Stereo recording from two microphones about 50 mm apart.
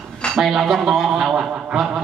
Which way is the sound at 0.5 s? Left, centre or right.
Centre.